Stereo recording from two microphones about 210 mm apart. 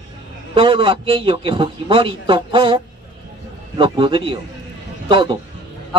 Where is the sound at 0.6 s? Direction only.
25° right (ahead or behind).